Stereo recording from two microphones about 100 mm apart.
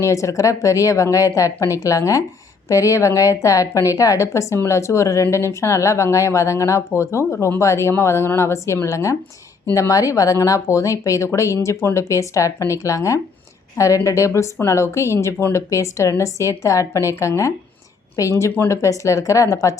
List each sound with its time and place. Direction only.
0.0 s a woman's voice: 30° left (ahead or behind)